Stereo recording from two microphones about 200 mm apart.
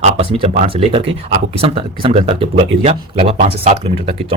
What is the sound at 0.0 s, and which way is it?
Speech, 30° right (ahead or behind).